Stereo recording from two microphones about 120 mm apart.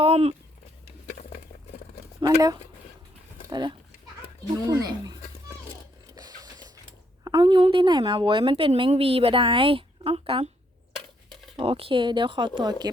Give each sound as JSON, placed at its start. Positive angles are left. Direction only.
{"t": 0.0, "sound": "a sound", "side_deg": -55}
{"t": 2.2, "sound": "speech", "side_deg": -30}
{"t": 6.1, "sound": "printer", "side_deg": -30}
{"t": 7.3, "sound": "a woman's voice", "side_deg": -40}
{"t": 11.5, "sound": "a woman's voice", "side_deg": -50}